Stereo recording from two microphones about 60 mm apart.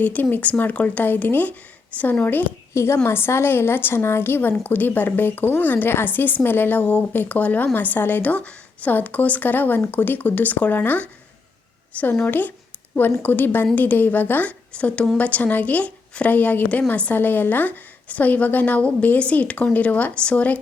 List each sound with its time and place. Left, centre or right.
0.0 s a woman's voice: left
2.7 s a woman's voice: left
12.2 s a woman's voice: left
14.7 s a woman's voice: left